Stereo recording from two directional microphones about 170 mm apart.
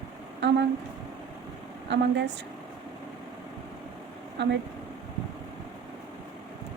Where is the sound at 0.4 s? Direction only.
90° right.